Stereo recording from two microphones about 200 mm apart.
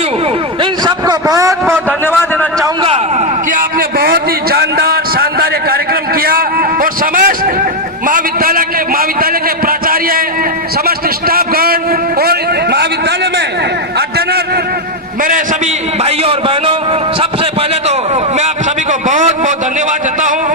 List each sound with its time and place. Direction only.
0.6 s a man's voice: 20° right (ahead or behind)
1.9 s a man's voice: 10° left (ahead or behind)
2.8 s a man's voice: 25° right (ahead or behind)
3.5 s a man's voice: 45° right (ahead or behind)
15.2 s a man's voice: 40° right (ahead or behind)